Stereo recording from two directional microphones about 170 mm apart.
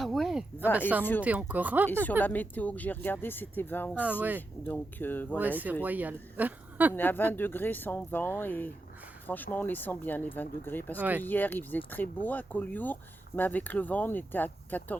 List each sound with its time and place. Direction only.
0.0 s a sound: centre (ahead or behind)
1.2 s speech: 10° right (ahead or behind)
2.2 s speech: 10° left (ahead or behind)
5.4 s speech: 10° right (ahead or behind)
6.9 s speech: 10° left (ahead or behind)